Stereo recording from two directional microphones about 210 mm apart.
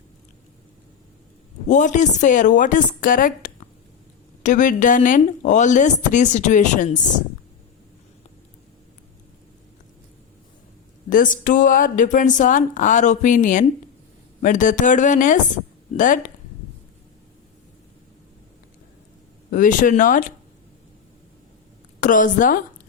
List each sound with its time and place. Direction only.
1.6 s speech: 35° left (ahead or behind)
11.1 s speech: 40° left (ahead or behind)
19.5 s speech: 40° left (ahead or behind)
22.0 s speech: 40° left (ahead or behind)